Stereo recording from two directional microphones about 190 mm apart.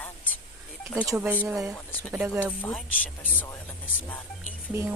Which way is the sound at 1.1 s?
10° right (ahead or behind).